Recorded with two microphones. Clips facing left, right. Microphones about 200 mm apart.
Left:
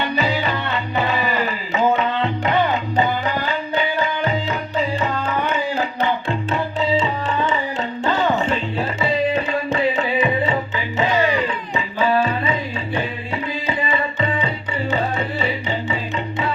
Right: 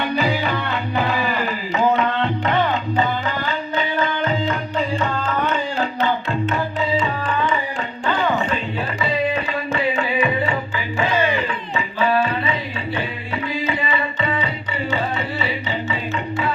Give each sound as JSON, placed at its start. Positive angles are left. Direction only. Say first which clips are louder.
{"t": 0.2, "sound": "music", "louder": "even", "side_deg": 0}
{"t": 0.9, "sound": "tabla", "louder": "left 1 dB", "side_deg": 0}
{"t": 4.4, "sound": "music", "louder": "even", "side_deg": 5}
{"t": 6.9, "sound": "tabla", "louder": "left 1 dB", "side_deg": 25}
{"t": 8.0, "sound": "music", "louder": "left 1 dB", "side_deg": 25}
{"t": 13.7, "sound": "music", "louder": "left 1 dB", "side_deg": 30}